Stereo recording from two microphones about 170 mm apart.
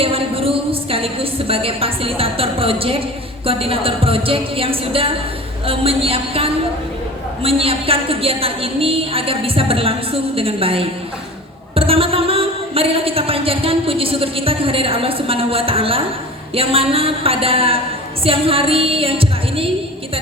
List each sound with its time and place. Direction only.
0.0 s a woman's voice: 35° right (ahead or behind)